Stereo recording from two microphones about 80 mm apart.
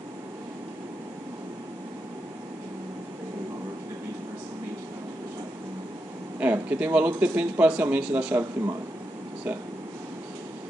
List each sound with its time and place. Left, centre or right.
6.4 s speech: right